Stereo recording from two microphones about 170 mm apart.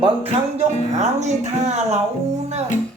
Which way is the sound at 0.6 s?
40° right (ahead or behind).